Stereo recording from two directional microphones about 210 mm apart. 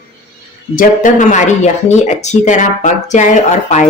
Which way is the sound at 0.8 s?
35° left (ahead or behind).